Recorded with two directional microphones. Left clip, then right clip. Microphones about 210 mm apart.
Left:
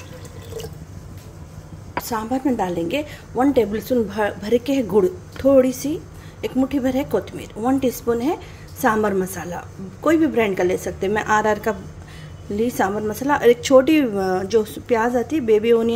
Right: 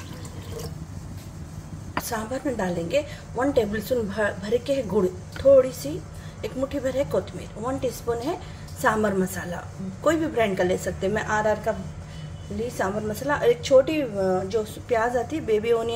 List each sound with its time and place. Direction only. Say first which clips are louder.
2.0 s a woman's voice: left 7 dB; 25° left (ahead or behind)